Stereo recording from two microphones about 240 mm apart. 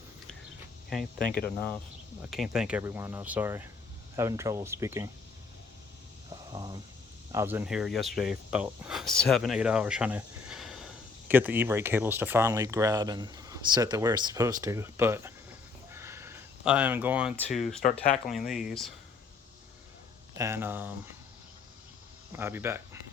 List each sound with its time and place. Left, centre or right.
0.9 s speech: centre
6.3 s a sound: centre
7.3 s speech: centre
17.8 s speech: left
18.3 s speech: centre
20.3 s speech: centre
22.3 s speech: centre